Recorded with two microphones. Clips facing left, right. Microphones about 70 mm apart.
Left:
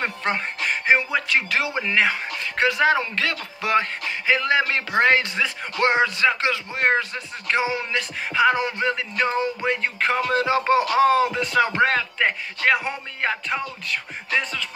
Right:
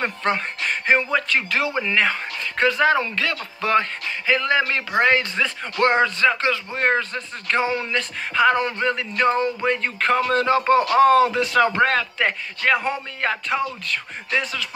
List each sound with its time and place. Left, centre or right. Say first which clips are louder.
0.0 s speech: right 2 dB; centre
1.5 s speech: right 1 dB; left
5.3 s speech: right 1 dB; centre
6.2 s speech: right 1 dB; left
11.2 s speech: right 2 dB; centre
11.6 s speech: right 1 dB; centre